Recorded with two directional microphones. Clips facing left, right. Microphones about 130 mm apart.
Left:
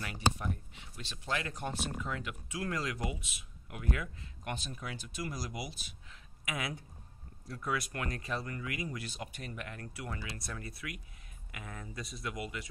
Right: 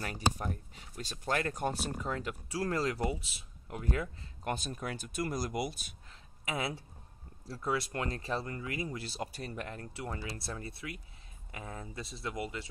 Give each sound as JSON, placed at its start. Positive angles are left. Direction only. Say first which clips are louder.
{"t": 0.0, "sound": "speech", "louder": "even", "side_deg": -40}
{"t": 6.4, "sound": "speech", "louder": "right 3 dB", "side_deg": -30}